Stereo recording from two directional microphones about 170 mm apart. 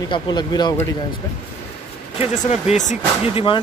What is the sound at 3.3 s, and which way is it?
Speech, 30° left (ahead or behind).